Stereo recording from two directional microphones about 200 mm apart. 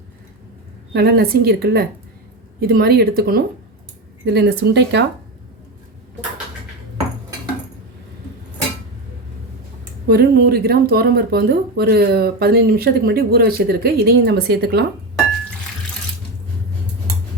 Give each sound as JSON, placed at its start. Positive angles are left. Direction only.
{"t": 0.9, "sound": "speech", "side_deg": -55}
{"t": 10.1, "sound": "speech", "side_deg": -50}